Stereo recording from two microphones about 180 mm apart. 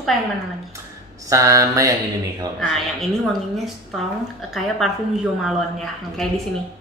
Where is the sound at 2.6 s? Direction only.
Centre (ahead or behind).